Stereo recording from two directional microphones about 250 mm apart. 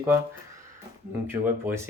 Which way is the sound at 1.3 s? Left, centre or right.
Centre.